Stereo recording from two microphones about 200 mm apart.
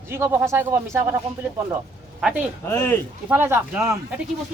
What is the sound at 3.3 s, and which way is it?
Speech, 10° right (ahead or behind).